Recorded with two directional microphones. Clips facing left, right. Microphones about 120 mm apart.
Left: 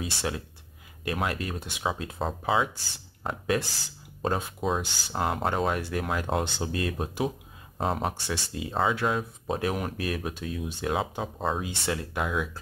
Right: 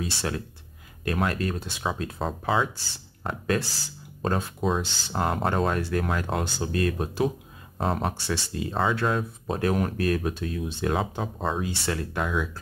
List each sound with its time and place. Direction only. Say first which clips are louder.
0.0 s speech: right 2 dB; 15° left (ahead or behind)
2.1 s speech: even; centre (ahead or behind)
3.3 s speech: right 1 dB; 15° left (ahead or behind)
7.7 s speech: right 1 dB; centre (ahead or behind)
8.1 s speech: right 3 dB; 10° left (ahead or behind)
11.6 s speech: right 2 dB; 15° left (ahead or behind)